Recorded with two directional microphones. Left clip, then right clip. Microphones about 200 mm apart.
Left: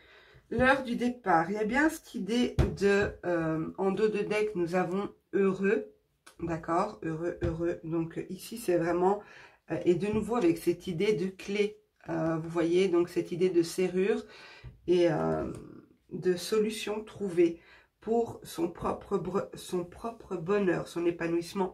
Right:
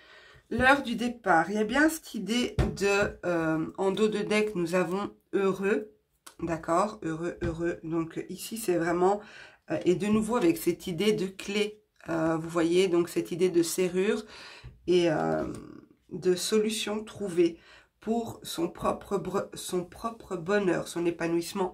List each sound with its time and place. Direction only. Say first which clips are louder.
0.5 s speech: right 3 dB; 40° right (ahead or behind)